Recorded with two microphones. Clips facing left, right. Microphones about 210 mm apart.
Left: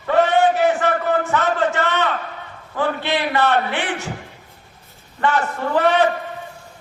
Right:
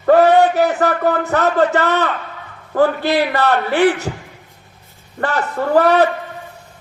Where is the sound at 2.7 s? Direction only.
40° right (ahead or behind).